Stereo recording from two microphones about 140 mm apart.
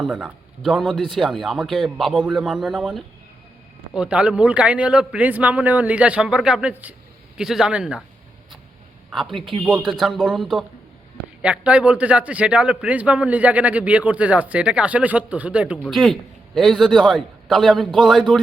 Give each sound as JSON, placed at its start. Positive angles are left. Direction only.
{"t": 0.0, "sound": "a man's voice", "side_deg": -5}
{"t": 9.1, "sound": "a man's voice", "side_deg": 0}
{"t": 15.8, "sound": "a man's voice", "side_deg": 0}